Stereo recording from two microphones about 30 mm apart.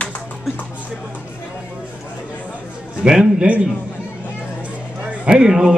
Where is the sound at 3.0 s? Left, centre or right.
Right.